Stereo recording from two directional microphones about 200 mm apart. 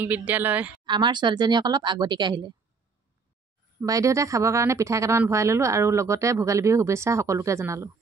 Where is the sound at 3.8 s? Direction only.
15° right (ahead or behind).